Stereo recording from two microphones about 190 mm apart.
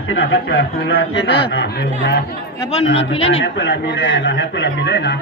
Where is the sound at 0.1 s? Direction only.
60° left (ahead or behind).